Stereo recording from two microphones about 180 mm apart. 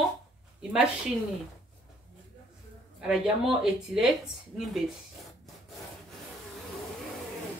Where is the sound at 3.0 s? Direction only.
5° right (ahead or behind).